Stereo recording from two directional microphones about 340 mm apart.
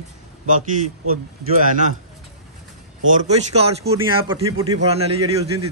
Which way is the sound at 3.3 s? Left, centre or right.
Centre.